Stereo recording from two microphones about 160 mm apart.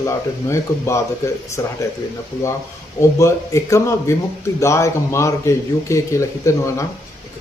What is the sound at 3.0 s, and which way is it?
A man's voice, 20° left (ahead or behind).